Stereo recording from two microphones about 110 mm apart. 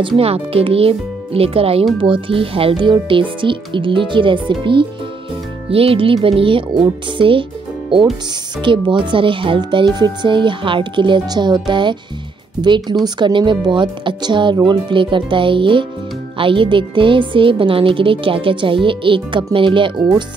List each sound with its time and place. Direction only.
0.2 s a child's voice: 65° right (ahead or behind)
5.7 s a child's voice: 60° right (ahead or behind)
8.5 s speech: 45° right (ahead or behind)